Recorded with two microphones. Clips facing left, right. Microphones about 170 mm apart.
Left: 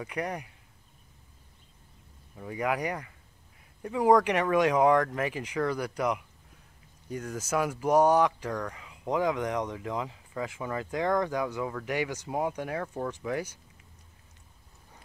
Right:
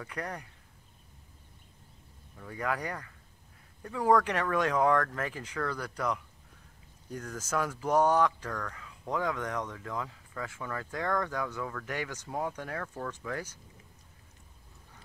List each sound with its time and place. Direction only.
0.0 s speech: 15° left (ahead or behind)
2.3 s speech: 15° left (ahead or behind)